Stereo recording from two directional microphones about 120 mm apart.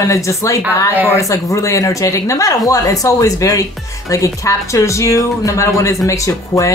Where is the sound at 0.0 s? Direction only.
25° left (ahead or behind).